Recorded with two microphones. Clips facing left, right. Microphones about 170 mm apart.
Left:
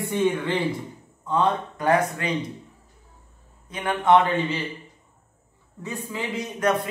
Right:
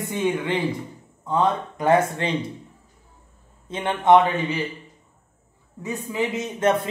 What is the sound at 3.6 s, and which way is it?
Speech, 25° right (ahead or behind).